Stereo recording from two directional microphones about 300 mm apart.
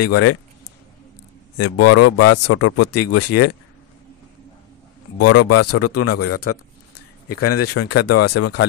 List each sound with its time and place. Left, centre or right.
0.0 s speech: left
1.6 s speech: left
5.2 s speech: left